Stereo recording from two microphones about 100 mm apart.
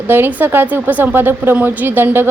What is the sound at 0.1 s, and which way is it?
A woman's voice, 20° right (ahead or behind).